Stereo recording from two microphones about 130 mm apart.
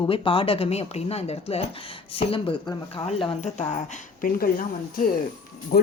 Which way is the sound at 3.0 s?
60° left (ahead or behind).